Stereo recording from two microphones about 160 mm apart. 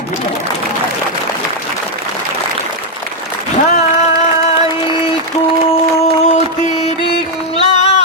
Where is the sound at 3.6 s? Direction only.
45° left (ahead or behind).